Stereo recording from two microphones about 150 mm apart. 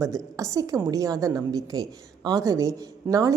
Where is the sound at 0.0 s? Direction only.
20° right (ahead or behind).